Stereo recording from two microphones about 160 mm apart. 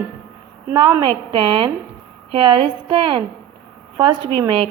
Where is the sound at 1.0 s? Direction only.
30° right (ahead or behind).